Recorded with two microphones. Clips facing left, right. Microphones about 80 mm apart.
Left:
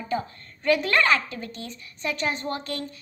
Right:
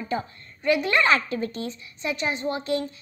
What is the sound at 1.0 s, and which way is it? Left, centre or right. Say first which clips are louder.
Speech: right 1 dB; right.